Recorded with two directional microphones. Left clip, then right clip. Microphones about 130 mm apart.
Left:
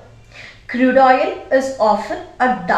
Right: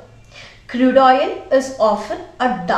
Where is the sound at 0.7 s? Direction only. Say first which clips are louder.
Even; 15° right (ahead or behind).